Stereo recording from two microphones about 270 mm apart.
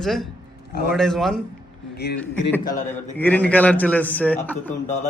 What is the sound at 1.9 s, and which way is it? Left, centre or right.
Speech, left.